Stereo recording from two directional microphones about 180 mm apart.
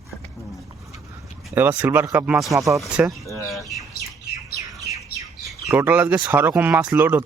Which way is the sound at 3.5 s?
Centre (ahead or behind).